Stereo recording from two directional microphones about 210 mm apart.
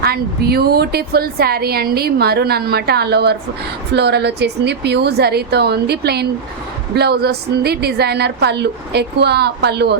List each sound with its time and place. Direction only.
0.0 s a woman's voice: 50° right (ahead or behind)